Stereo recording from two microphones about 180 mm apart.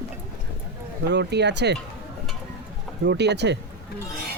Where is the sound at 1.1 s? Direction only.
70° right (ahead or behind).